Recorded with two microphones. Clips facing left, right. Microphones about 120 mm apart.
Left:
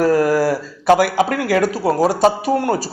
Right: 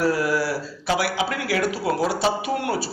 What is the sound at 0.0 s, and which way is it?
Speech, 45° left (ahead or behind).